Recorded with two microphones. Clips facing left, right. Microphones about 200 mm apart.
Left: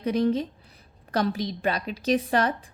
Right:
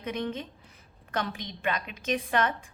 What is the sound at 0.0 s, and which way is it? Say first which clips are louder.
A woman's voice: left 9 dB; 35° left (ahead or behind).